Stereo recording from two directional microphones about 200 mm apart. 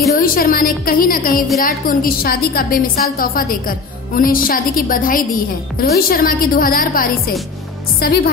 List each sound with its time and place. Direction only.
0.2 s a woman's voice: 45° left (ahead or behind)